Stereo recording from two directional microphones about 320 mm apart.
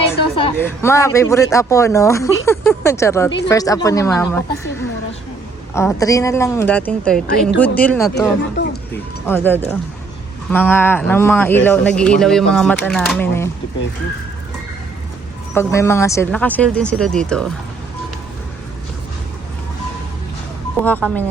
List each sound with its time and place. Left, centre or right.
0.3 s speech: centre
8.6 s music: left
9.2 s speech: centre
15.5 s speech: centre
20.8 s speech: centre